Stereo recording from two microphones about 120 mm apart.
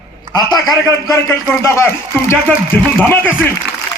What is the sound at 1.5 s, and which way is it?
Speech, 20° left (ahead or behind).